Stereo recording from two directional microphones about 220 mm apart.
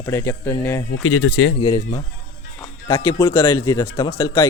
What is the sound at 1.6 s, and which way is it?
Speech, 20° left (ahead or behind).